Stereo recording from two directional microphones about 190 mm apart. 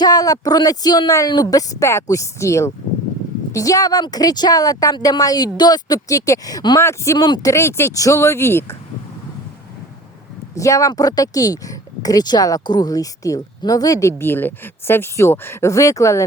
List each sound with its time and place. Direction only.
0.0 s a woman's voice: 20° left (ahead or behind)
10.5 s speech: 15° left (ahead or behind)